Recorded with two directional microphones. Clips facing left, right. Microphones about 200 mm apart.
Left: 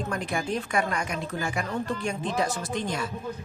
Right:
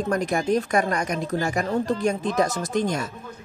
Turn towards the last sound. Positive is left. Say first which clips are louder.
# right 6 dB
turn(degrees=-45)  # may be behind; listen again after turning